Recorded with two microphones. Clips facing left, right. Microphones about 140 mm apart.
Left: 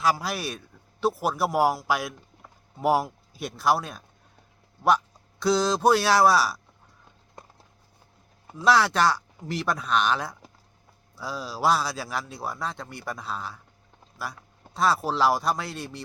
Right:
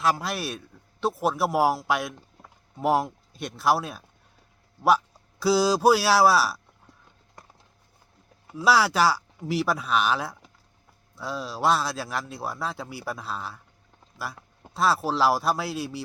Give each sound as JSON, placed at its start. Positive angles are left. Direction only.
{"t": 0.0, "sound": "a man's voice", "side_deg": 0}
{"t": 8.5, "sound": "a man's voice", "side_deg": -5}